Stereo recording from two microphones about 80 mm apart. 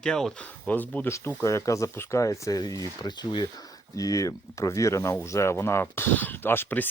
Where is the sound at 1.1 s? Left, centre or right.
Left.